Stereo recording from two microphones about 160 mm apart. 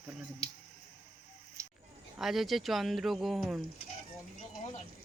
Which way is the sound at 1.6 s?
20° right (ahead or behind).